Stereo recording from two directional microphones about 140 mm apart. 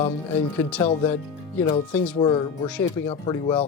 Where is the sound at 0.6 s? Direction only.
15° left (ahead or behind).